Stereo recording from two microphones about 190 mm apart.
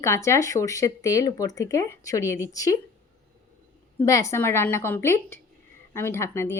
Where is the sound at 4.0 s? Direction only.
15° left (ahead or behind).